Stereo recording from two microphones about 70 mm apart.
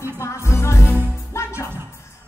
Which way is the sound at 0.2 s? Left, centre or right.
Left.